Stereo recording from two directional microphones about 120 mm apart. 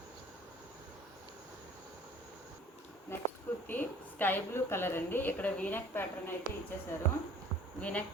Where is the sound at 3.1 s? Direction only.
20° left (ahead or behind).